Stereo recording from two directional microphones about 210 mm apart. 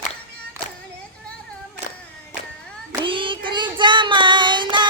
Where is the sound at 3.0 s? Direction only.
25° right (ahead or behind).